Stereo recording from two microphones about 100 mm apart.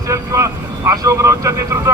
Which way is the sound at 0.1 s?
30° right (ahead or behind).